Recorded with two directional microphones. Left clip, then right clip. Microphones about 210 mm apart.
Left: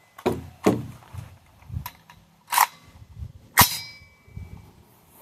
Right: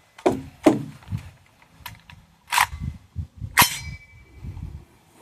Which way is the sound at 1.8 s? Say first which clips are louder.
Right 1 dB; 5° right (ahead or behind).